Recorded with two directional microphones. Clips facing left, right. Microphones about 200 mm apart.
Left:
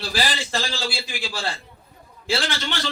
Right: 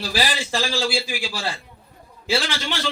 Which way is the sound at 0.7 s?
10° right (ahead or behind).